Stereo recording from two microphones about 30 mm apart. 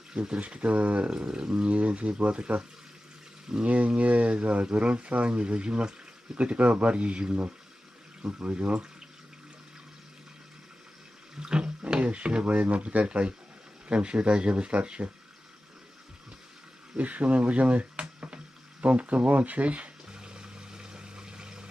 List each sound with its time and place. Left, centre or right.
0.3 s speech: right
1.1 s speech: right
1.6 s speech: right
3.5 s speech: centre
3.8 s speech: right
6.3 s speech: right
8.2 s speech: right
8.5 s speech: right
11.3 s water: right
11.9 s speech: right
12.7 s speech: right
13.1 s speech: right
17.0 s speech: right
20.1 s water: right